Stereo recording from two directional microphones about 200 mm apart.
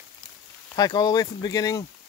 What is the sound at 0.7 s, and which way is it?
Speech, 20° left (ahead or behind).